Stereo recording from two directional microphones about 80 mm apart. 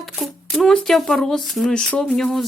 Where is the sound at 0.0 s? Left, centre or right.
Centre.